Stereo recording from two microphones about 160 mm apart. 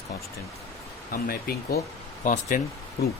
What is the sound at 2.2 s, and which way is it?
Speech, 55° left (ahead or behind).